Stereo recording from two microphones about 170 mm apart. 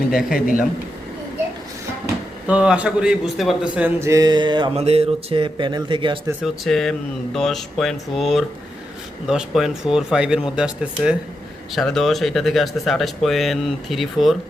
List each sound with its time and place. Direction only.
0.1 s speech: centre (ahead or behind)
0.3 s a man's voice: 55° left (ahead or behind)
2.5 s a man's voice: 5° right (ahead or behind); by 6.1 s 30° right (ahead or behind)
6.4 s speech: centre (ahead or behind)